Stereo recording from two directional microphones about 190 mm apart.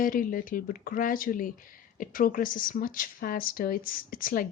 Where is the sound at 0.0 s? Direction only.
45° left (ahead or behind).